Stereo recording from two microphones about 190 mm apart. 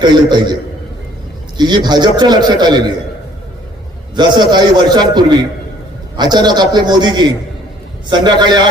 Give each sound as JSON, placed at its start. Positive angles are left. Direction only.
{"t": 0.0, "sound": "a man's voice", "side_deg": -25}
{"t": 1.5, "sound": "a man's voice", "side_deg": -25}
{"t": 4.1, "sound": "a man's voice", "side_deg": -25}